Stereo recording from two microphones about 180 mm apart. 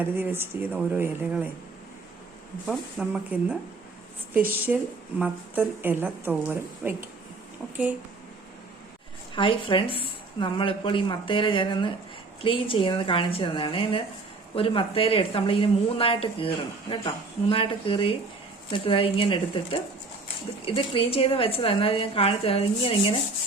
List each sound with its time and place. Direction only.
0.0 s a woman's voice: 10° right (ahead or behind)
2.6 s speech: 5° right (ahead or behind)
4.7 s a woman's voice: 5° right (ahead or behind)
9.3 s a woman's voice: 30° left (ahead or behind)